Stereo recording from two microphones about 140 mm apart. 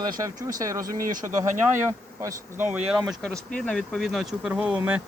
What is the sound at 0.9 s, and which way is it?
Speech, 80° right.